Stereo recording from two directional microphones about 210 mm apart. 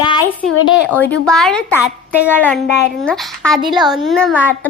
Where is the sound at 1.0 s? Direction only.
5° left (ahead or behind).